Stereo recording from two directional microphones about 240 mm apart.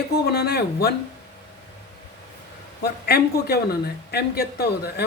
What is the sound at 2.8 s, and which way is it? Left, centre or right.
A woman's voice, left.